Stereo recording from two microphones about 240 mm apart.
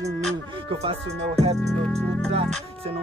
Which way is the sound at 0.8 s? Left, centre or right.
Right.